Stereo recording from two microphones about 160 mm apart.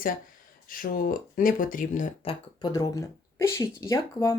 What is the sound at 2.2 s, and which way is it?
Speech, 30° left (ahead or behind).